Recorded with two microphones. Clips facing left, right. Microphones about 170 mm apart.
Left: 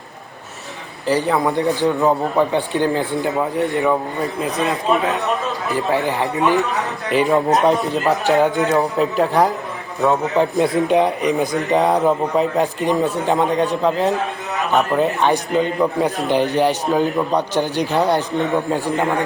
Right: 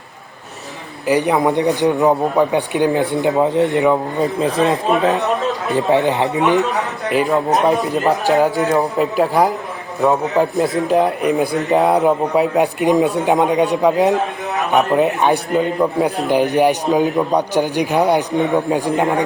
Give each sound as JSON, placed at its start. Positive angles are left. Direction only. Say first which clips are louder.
{"t": 1.0, "sound": "a man's voice", "louder": "right 3 dB", "side_deg": -15}
{"t": 7.1, "sound": "a man's voice", "louder": "even", "side_deg": 0}